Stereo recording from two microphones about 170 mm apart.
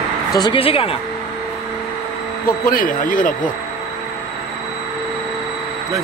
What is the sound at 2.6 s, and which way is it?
Speech, 55° left (ahead or behind).